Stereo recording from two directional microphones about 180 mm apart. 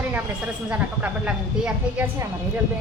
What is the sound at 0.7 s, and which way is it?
Speech, 10° right (ahead or behind).